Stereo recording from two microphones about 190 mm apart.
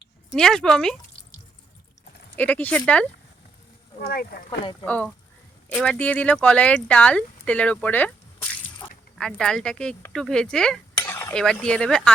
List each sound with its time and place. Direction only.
0.3 s speech: 5° left (ahead or behind)
2.3 s speech: 10° left (ahead or behind)
4.0 s speech: 50° left (ahead or behind)
5.7 s speech: 5° left (ahead or behind)
9.1 s a sound: 5° left (ahead or behind)